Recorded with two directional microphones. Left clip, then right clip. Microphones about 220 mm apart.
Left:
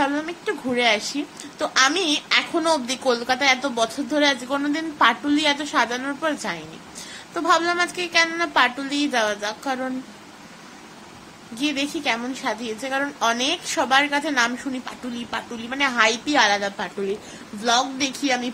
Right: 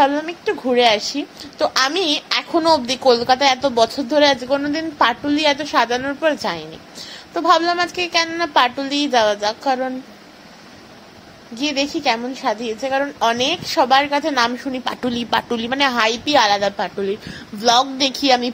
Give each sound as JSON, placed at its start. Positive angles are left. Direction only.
{"t": 0.0, "sound": "a woman's voice", "side_deg": -15}
{"t": 11.5, "sound": "a woman's voice", "side_deg": -15}
{"t": 14.9, "sound": "a woman's voice", "side_deg": -35}